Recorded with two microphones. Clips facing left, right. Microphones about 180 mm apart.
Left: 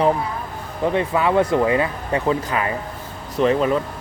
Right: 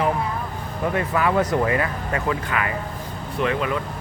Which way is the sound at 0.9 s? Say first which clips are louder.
Left 3 dB; 20° left (ahead or behind).